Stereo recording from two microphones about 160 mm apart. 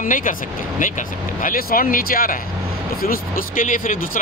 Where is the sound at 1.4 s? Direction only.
60° left (ahead or behind).